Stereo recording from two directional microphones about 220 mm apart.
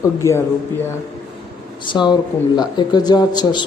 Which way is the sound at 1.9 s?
20° left (ahead or behind).